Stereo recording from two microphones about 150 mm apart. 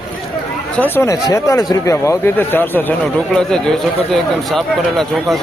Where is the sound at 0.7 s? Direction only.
15° left (ahead or behind).